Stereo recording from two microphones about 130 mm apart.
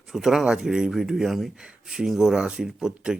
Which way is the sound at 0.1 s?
5° right (ahead or behind).